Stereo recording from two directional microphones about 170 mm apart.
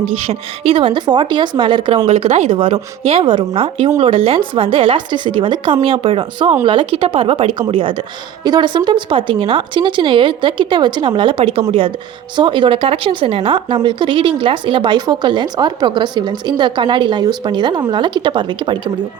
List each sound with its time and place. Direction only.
0.0 s a woman's voice: 35° right (ahead or behind)
2.0 s a woman's voice: 40° right (ahead or behind)